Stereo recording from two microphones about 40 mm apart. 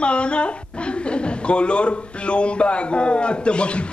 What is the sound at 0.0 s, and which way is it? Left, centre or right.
Speech, left.